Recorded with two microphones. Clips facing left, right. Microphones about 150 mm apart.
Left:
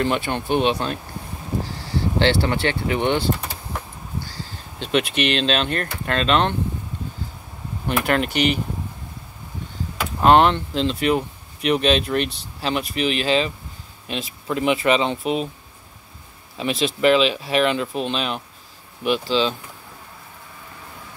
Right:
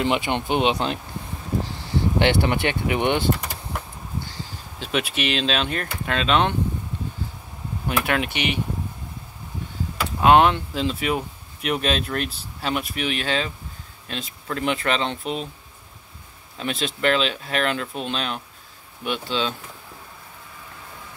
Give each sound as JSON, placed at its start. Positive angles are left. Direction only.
{"t": 0.0, "sound": "speech", "side_deg": -15}
{"t": 2.1, "sound": "speech", "side_deg": -15}
{"t": 4.7, "sound": "speech", "side_deg": -5}
{"t": 8.0, "sound": "speech", "side_deg": 0}
{"t": 10.2, "sound": "speech", "side_deg": -5}
{"t": 16.5, "sound": "speech", "side_deg": 5}